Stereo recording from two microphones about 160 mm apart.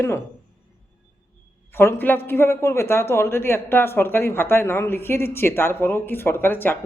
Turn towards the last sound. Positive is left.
turn(degrees=15)  # may be behind; listen again after turning